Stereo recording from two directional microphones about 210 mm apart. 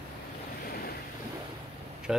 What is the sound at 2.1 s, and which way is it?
Vehicle, centre (ahead or behind).